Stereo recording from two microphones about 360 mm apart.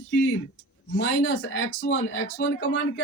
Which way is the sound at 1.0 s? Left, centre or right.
Left.